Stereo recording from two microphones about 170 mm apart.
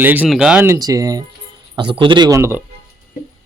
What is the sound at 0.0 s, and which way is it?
Speech, 10° right (ahead or behind).